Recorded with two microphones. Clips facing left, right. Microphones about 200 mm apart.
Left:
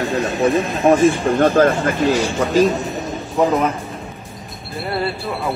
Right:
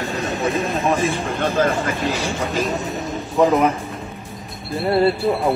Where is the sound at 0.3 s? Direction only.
Centre (ahead or behind).